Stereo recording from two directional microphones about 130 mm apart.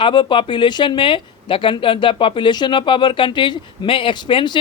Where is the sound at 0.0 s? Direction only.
40° left (ahead or behind).